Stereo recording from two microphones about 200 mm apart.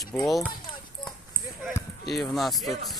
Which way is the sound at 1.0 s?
25° left (ahead or behind).